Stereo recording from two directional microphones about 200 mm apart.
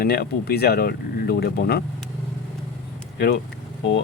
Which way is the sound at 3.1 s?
55° left (ahead or behind).